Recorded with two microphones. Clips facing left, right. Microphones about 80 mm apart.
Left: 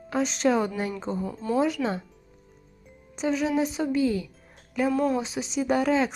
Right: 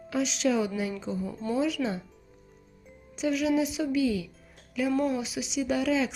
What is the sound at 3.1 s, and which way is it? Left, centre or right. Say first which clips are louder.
Speech: left 1 dB; left.